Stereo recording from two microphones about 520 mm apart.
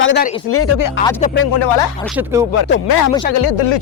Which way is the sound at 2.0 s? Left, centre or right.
Centre.